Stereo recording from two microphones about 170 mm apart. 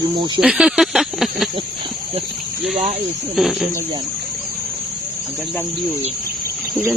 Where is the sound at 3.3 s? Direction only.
Centre (ahead or behind).